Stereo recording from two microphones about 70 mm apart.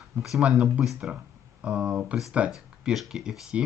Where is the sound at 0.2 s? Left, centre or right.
Centre.